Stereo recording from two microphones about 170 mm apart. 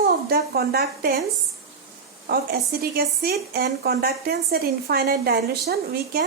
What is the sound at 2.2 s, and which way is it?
Speech, 65° right (ahead or behind).